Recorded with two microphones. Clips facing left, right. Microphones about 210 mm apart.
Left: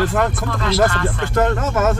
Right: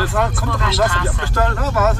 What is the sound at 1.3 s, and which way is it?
Speech, 25° left (ahead or behind).